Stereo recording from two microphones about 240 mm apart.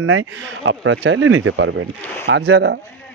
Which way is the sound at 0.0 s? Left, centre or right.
Right.